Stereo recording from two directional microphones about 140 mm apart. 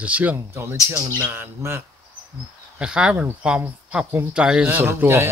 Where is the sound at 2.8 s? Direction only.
5° right (ahead or behind).